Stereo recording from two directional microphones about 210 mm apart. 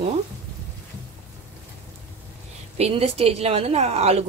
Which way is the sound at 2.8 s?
30° right (ahead or behind).